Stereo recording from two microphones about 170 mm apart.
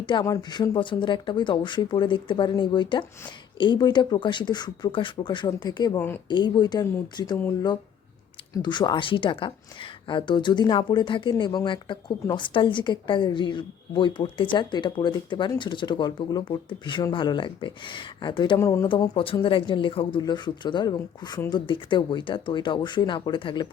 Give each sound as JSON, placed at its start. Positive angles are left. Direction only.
{"t": 0.0, "sound": "speech", "side_deg": 25}
{"t": 8.6, "sound": "speech", "side_deg": 25}